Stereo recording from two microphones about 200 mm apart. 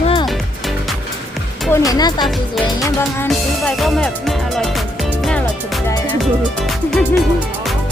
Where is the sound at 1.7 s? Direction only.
15° left (ahead or behind).